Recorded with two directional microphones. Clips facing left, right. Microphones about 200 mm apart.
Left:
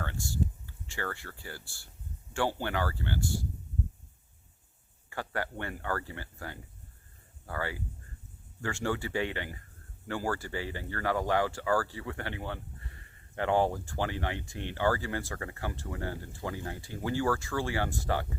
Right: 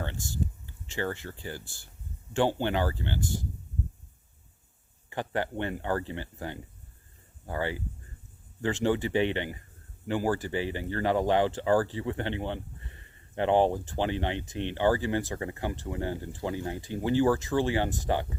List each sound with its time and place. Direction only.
0.0 s speech: 20° right (ahead or behind)
5.0 s speech: 20° right (ahead or behind)